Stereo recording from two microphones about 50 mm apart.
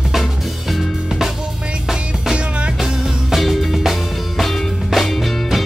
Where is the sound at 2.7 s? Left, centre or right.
Centre.